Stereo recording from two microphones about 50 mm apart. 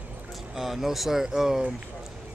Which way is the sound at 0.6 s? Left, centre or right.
Centre.